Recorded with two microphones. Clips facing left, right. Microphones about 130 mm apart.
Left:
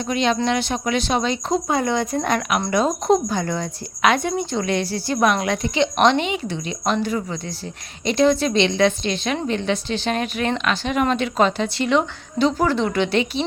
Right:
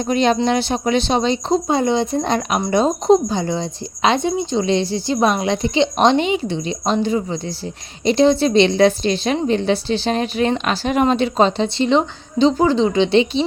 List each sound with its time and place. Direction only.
0.0 s a woman's voice: 40° right (ahead or behind)